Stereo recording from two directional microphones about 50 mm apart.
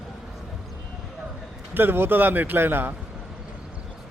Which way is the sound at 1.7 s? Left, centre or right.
Right.